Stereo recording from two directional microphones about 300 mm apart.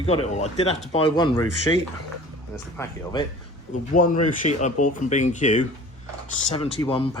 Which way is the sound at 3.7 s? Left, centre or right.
Left.